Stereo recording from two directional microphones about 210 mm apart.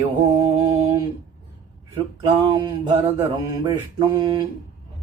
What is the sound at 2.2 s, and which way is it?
Mantra, 20° right (ahead or behind).